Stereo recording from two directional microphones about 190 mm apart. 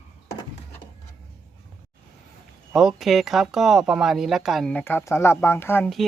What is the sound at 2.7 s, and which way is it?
Speech, 5° right (ahead or behind).